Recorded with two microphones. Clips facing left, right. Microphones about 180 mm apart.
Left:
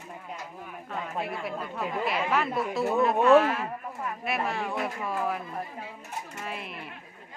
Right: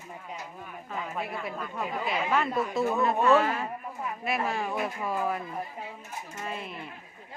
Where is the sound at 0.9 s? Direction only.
Centre (ahead or behind).